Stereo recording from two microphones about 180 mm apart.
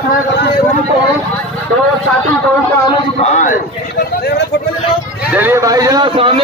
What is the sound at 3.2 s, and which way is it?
Speech, 45° left (ahead or behind).